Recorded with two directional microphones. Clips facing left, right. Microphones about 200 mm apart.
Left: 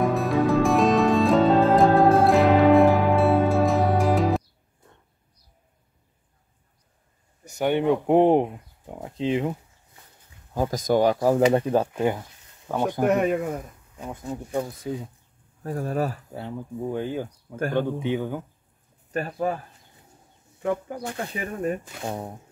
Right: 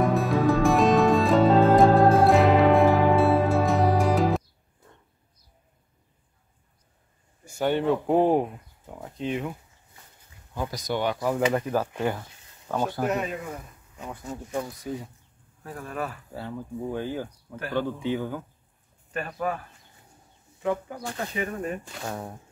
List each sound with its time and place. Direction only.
0.0 s music: centre (ahead or behind)
7.4 s speech: 15° left (ahead or behind)
10.5 s speech: 45° left (ahead or behind); by 13.0 s 20° left (ahead or behind)
13.0 s speech: 60° left (ahead or behind)
14.1 s speech: 15° left (ahead or behind)
15.6 s speech: 40° left (ahead or behind)
16.3 s speech: 15° left (ahead or behind)
19.1 s speech: 30° left (ahead or behind)